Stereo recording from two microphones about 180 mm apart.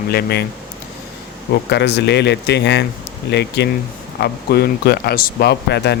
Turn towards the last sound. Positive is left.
turn(degrees=70)  # may be behind; listen again after turning